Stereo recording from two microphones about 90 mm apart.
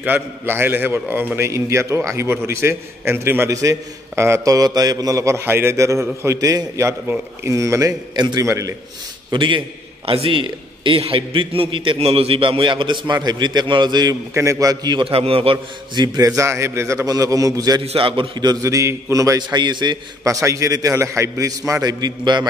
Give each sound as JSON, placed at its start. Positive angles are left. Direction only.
{"t": 0.0, "sound": "a man's voice", "side_deg": -20}
{"t": 9.3, "sound": "a man's voice", "side_deg": -65}
{"t": 10.0, "sound": "a man's voice", "side_deg": -85}
{"t": 14.3, "sound": "a man's voice", "side_deg": -35}
{"t": 15.0, "sound": "a man's voice", "side_deg": -90}
{"t": 15.9, "sound": "a man's voice", "side_deg": -55}
{"t": 16.3, "sound": "a man's voice", "side_deg": -30}
{"t": 17.9, "sound": "a man's voice", "side_deg": -75}
{"t": 18.6, "sound": "a man's voice", "side_deg": -35}
{"t": 20.2, "sound": "a man's voice", "side_deg": -35}
{"t": 22.0, "sound": "a man's voice", "side_deg": -55}